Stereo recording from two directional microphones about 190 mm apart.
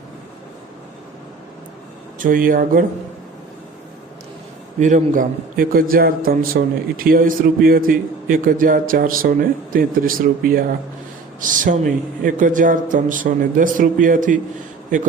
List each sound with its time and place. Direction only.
2.1 s a man's voice: 45° right (ahead or behind)
4.8 s a man's voice: 40° right (ahead or behind)